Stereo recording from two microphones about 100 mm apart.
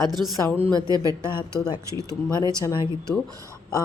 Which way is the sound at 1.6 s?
40° left (ahead or behind).